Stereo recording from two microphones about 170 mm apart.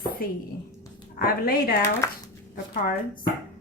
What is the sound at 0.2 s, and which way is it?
Speech, 60° left (ahead or behind).